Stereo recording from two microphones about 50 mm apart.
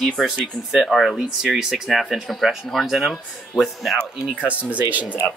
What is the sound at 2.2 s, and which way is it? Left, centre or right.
Speech, centre.